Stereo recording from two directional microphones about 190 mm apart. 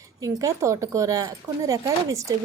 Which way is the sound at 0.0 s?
15° right (ahead or behind).